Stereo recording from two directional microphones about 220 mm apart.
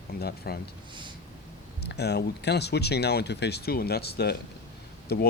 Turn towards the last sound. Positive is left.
turn(degrees=45)  # may be behind; listen again after turning